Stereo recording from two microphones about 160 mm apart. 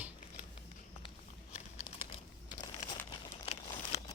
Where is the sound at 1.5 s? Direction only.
45° left (ahead or behind).